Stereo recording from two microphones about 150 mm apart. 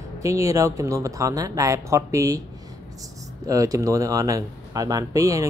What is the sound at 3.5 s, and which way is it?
Speech, 20° right (ahead or behind).